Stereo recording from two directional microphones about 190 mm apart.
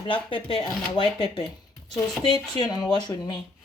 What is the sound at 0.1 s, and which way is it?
Speech, 25° left (ahead or behind).